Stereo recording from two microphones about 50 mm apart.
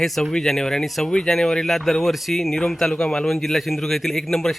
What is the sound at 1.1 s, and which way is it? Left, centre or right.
Speech, centre.